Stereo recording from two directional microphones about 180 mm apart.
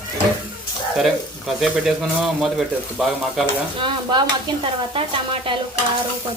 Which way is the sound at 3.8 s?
25° right (ahead or behind).